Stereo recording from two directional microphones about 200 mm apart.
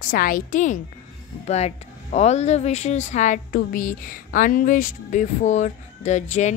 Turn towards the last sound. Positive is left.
turn(degrees=35)  # may be behind; listen again after turning